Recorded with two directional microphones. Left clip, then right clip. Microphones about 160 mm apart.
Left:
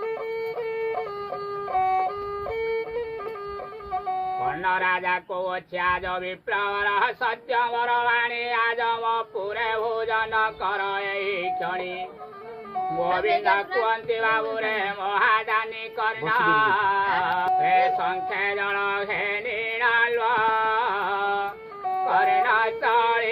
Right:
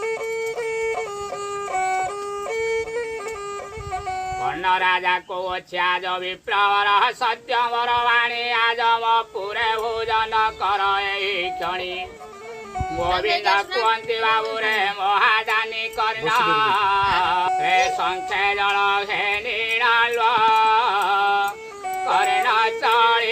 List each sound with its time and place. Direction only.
2.6 s music: 15° right (ahead or behind)
4.4 s speech: 20° right (ahead or behind)
13.1 s speech: 40° right (ahead or behind)
13.8 s music: 25° right (ahead or behind)